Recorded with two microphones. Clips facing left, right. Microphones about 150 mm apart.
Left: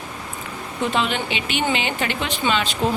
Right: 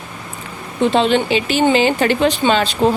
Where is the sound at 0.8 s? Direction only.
30° right (ahead or behind).